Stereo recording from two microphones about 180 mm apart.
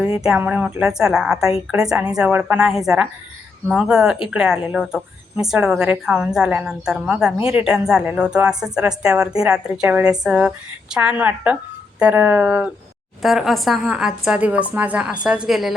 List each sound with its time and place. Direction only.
0.3 s a woman's voice: 10° right (ahead or behind)